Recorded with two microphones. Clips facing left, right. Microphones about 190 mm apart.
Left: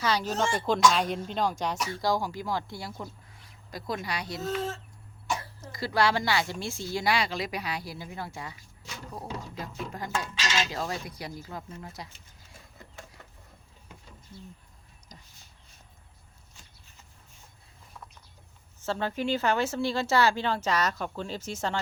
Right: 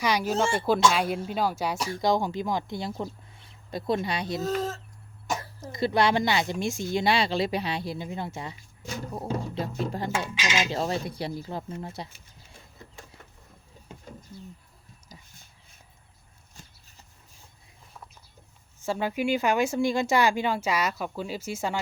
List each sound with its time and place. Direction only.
0.0 s speech: 10° right (ahead or behind)
1.9 s speech: 20° right (ahead or behind)
4.4 s speech: 40° right (ahead or behind)
5.5 s speech: 20° right (ahead or behind)
10.2 s speech: 10° right (ahead or behind)
10.7 s speech: 30° right (ahead or behind)
13.9 s a sound: 25° right (ahead or behind)
15.1 s a sound: 10° right (ahead or behind)
18.8 s speech: 10° right (ahead or behind)